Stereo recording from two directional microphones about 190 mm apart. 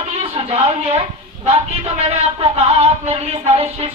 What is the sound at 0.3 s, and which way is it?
A woman's voice, 30° right (ahead or behind).